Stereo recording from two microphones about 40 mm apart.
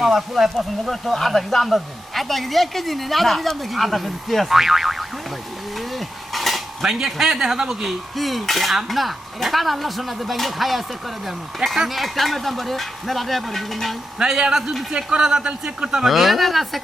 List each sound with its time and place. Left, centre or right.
0.0 s speech: centre
0.5 s speech: centre
5.7 s livestock: centre
6.8 s speech: centre
8.1 s speech: centre
14.2 s speech: centre
14.8 s a man's voice: right
16.0 s speech: centre